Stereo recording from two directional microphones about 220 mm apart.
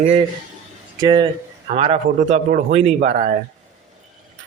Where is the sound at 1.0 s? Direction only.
20° right (ahead or behind).